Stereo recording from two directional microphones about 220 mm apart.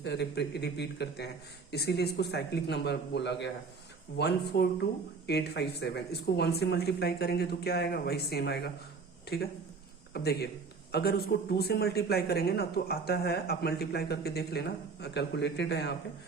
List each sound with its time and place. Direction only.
0.0 s a man's voice: 50° left (ahead or behind)
10.1 s a man's voice: 45° left (ahead or behind)